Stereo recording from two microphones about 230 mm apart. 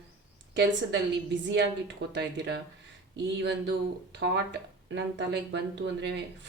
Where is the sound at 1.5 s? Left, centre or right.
Right.